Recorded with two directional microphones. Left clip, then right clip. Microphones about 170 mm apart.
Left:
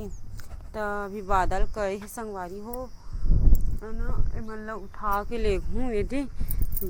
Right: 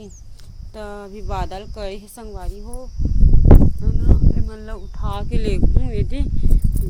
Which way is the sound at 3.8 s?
15° right (ahead or behind).